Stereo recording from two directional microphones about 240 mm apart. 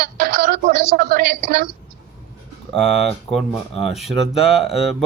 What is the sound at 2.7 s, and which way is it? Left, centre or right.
Speech, centre.